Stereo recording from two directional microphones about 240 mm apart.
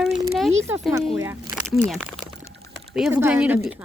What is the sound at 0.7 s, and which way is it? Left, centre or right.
Speech, centre.